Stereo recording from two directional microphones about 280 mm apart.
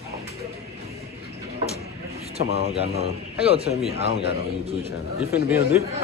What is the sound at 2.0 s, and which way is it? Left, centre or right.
A man's voice, right.